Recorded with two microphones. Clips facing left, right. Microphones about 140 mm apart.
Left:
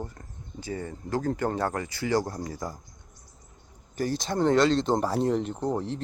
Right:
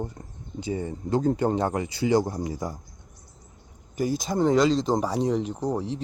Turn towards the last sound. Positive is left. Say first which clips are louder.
# right 1 dB
turn(degrees=0)  # may be behind; listen again after turning